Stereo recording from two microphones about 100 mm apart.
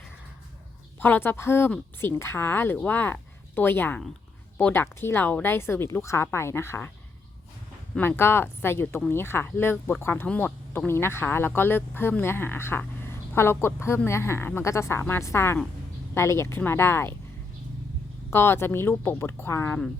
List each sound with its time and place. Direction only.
1.0 s speech: 20° left (ahead or behind)
7.9 s speech: 20° left (ahead or behind)
18.3 s speech: 25° left (ahead or behind)